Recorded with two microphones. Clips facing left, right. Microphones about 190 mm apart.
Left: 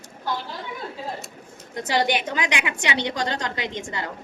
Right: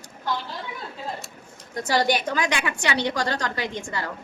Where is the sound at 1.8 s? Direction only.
20° left (ahead or behind).